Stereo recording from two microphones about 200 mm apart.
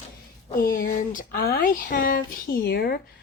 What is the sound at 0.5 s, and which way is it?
Speech, 45° left (ahead or behind).